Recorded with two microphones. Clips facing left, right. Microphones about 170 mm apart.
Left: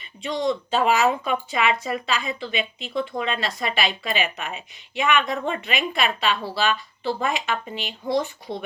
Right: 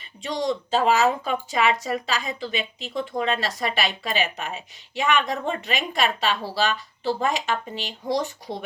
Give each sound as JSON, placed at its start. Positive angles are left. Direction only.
{"t": 0.0, "sound": "speech", "side_deg": -40}